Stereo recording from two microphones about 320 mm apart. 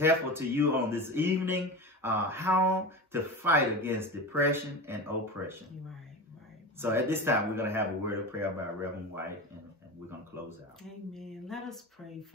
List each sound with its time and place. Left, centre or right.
0.0 s speech: centre
6.8 s speech: centre
11.1 s a sound: centre